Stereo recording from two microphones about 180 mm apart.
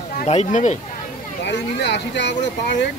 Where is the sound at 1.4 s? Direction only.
75° left (ahead or behind).